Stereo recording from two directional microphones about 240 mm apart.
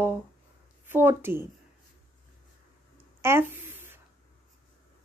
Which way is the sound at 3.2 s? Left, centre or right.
Centre.